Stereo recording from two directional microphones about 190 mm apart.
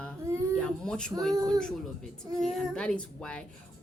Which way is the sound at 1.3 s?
20° right (ahead or behind).